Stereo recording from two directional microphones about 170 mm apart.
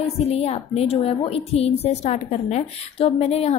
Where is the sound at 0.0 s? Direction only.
35° left (ahead or behind).